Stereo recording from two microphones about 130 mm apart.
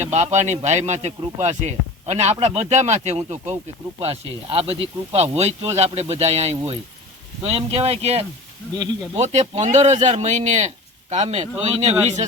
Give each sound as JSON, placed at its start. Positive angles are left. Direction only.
{"t": 0.0, "sound": "speech", "side_deg": -60}